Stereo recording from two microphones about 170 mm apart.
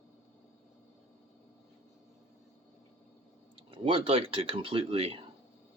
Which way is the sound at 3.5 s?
30° right (ahead or behind).